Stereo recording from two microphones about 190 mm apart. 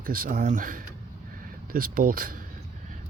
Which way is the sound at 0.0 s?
50° right (ahead or behind).